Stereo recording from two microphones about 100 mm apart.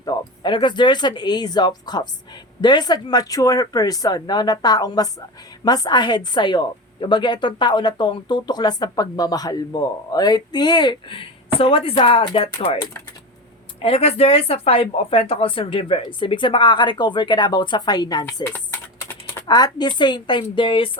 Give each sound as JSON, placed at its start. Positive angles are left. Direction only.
{"t": 0.0, "sound": "a woman's voice", "side_deg": 45}
{"t": 13.8, "sound": "speech", "side_deg": 80}
{"t": 18.4, "sound": "typing", "side_deg": 20}
{"t": 19.5, "sound": "a woman's voice", "side_deg": 45}